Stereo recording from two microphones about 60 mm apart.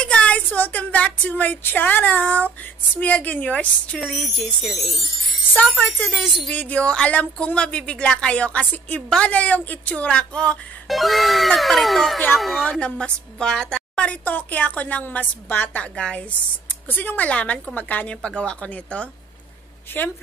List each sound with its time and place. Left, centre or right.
0.0 s a sound: centre
0.5 s speech: left
4.0 s speech: centre
5.5 s speech: left
10.9 s speech: centre
12.7 s a woman's voice: centre; by 15.7 s left
15.7 s speech: centre
16.9 s speech: left
19.9 s a woman's voice: left